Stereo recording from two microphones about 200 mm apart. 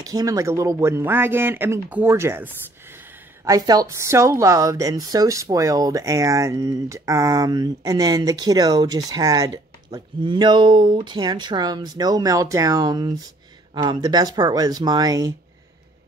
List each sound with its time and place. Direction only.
0.0 s speech: 15° right (ahead or behind)